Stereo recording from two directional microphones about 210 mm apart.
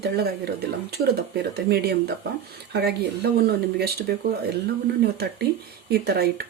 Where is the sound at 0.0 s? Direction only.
50° right (ahead or behind).